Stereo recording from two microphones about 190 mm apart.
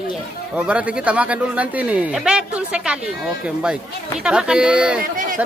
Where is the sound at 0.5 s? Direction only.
5° right (ahead or behind).